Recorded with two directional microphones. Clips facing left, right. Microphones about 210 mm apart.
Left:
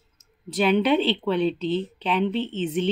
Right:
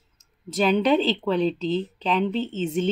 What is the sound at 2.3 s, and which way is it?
Speech, 40° right (ahead or behind).